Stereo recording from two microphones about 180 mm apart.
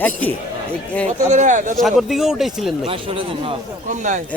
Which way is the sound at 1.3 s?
40° right (ahead or behind).